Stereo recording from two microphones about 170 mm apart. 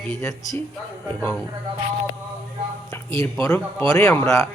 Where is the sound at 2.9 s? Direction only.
15° left (ahead or behind).